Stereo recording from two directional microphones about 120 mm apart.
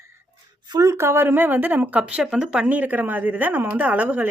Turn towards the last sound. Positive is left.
turn(degrees=-15)  # may be behind; listen again after turning